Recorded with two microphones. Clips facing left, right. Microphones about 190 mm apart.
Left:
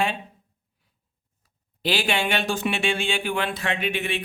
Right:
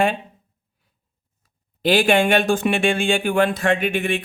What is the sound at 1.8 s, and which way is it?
Speech, 50° right (ahead or behind).